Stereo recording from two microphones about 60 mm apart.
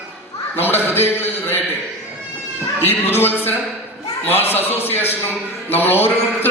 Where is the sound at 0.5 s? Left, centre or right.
Left.